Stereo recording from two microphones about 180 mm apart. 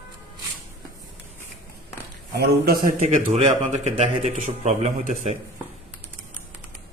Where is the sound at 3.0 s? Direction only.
40° right (ahead or behind).